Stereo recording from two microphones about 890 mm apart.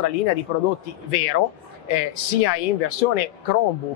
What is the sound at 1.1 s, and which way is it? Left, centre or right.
Speech, left.